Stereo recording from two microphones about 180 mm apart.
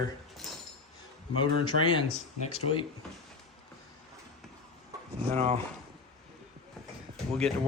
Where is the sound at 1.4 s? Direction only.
30° left (ahead or behind).